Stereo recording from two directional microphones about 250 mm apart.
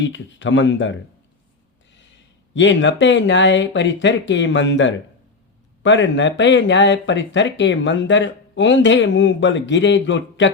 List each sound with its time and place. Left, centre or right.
0.0 s speech: left
2.6 s speech: left